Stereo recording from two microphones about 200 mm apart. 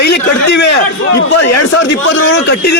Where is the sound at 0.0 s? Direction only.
60° left (ahead or behind).